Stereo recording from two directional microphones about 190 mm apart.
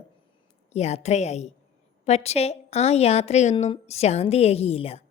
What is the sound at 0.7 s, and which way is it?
A woman's voice, 35° left (ahead or behind).